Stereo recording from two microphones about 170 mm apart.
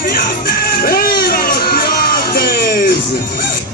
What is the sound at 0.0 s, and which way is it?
Music, 60° left (ahead or behind).